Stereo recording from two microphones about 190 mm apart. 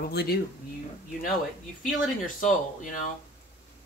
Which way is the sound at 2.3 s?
45° left (ahead or behind).